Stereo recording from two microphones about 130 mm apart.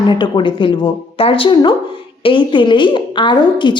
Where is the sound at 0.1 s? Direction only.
35° left (ahead or behind).